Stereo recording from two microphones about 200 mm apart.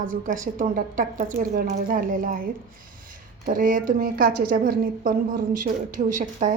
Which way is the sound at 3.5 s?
40° right (ahead or behind).